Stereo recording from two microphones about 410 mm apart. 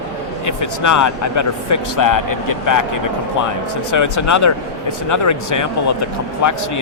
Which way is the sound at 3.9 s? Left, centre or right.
Left.